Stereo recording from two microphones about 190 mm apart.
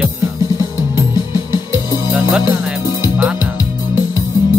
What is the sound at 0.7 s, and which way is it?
Music, 25° left (ahead or behind).